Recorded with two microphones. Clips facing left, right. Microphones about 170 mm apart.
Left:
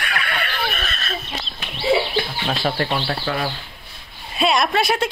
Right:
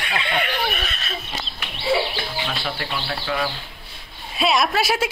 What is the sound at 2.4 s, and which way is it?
Speech, 40° left (ahead or behind).